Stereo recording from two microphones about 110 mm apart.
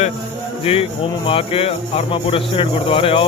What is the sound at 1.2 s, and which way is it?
Speech, 55° left (ahead or behind).